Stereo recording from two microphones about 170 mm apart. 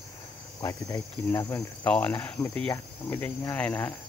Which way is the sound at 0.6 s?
20° left (ahead or behind).